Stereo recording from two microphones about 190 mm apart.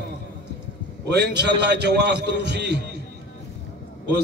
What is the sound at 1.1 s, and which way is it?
A man's voice, 65° right (ahead or behind).